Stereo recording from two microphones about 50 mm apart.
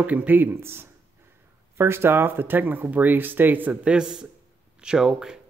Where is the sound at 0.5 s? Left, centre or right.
Right.